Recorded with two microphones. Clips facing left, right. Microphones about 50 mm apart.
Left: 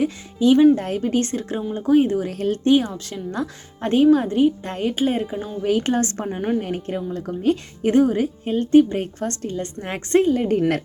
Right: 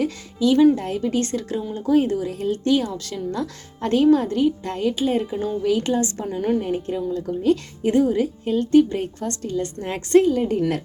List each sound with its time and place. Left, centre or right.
0.0 s speech: left
0.8 s speech: left
2.1 s a woman's voice: left
2.6 s speech: left
5.2 s speech: centre
5.6 s a woman's voice: left
9.0 s speech: left